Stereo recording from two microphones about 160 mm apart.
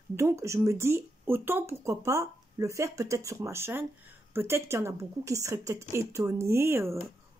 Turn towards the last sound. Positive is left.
turn(degrees=-15)  # may be behind; listen again after turning